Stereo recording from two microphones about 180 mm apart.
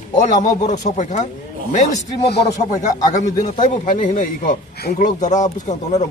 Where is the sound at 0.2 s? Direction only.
40° left (ahead or behind).